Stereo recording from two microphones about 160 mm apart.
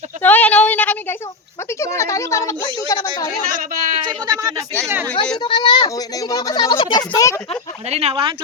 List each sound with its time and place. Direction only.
0.2 s a sound: 10° left (ahead or behind)
1.8 s speech: 20° left (ahead or behind)
3.5 s speech: 60° right (ahead or behind)
3.9 s a sound: 25° right (ahead or behind)
5.4 s speech: 30° left (ahead or behind)
7.9 s speech: 40° right (ahead or behind)